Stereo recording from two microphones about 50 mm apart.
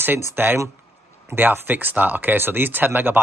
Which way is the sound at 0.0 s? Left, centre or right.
Right.